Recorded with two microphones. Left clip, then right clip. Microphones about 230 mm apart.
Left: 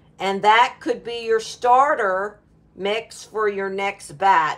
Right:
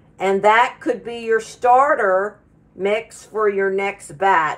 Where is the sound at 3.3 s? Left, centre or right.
Left.